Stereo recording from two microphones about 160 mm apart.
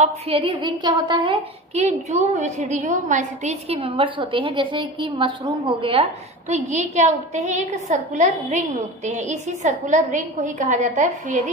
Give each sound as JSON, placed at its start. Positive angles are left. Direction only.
{"t": 0.3, "sound": "a woman's voice", "side_deg": -30}
{"t": 1.8, "sound": "a woman's voice", "side_deg": -45}
{"t": 6.5, "sound": "a woman's voice", "side_deg": -45}